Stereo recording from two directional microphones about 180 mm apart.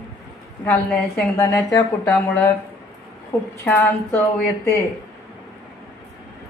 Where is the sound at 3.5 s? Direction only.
10° left (ahead or behind).